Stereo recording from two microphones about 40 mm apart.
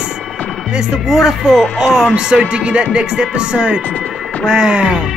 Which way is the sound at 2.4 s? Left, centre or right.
Right.